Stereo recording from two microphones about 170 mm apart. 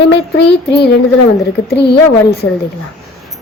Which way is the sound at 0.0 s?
90° left.